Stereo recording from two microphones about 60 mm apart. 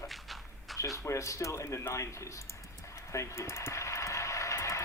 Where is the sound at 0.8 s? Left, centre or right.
Left.